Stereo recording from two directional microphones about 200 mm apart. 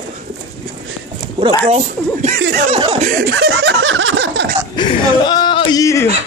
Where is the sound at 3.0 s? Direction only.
50° right (ahead or behind).